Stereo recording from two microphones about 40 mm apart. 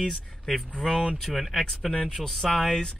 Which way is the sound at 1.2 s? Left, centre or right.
Centre.